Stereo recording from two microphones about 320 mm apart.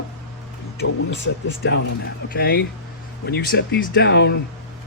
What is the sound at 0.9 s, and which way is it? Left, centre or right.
Speech, left.